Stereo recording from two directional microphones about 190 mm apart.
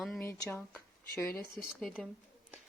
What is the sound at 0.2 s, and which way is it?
Speech, 15° left (ahead or behind).